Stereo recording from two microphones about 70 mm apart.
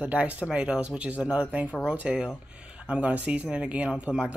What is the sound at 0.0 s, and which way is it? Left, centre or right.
Speech, right.